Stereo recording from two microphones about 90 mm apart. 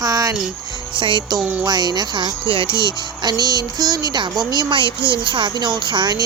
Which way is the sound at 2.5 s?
75° right (ahead or behind).